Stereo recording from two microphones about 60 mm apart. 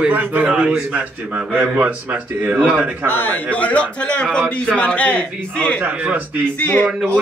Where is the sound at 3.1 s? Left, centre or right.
Left.